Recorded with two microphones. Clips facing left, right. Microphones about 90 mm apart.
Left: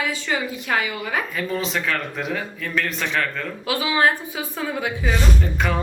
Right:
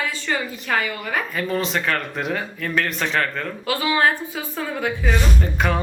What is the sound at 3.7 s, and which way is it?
A woman's voice, 15° left (ahead or behind).